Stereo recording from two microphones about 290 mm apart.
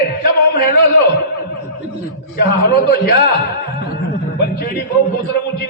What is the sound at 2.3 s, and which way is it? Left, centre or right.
Speech, left.